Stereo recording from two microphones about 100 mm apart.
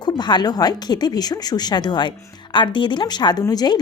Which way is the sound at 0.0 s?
45° left (ahead or behind).